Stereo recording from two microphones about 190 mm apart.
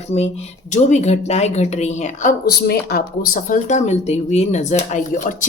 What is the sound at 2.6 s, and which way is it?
Speech, 50° left (ahead or behind).